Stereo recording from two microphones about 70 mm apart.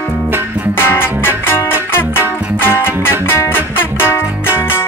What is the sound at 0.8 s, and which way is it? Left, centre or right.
Music, left.